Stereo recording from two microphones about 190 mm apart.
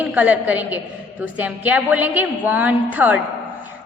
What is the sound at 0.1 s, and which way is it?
A woman's voice, 10° right (ahead or behind).